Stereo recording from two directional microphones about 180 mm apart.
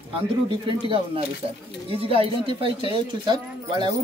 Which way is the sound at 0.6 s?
30° right (ahead or behind).